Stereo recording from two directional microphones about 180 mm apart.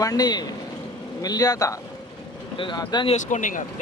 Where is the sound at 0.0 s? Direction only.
20° left (ahead or behind).